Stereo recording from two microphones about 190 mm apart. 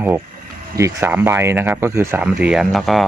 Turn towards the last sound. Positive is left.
turn(degrees=0)  # may be behind; listen again after turning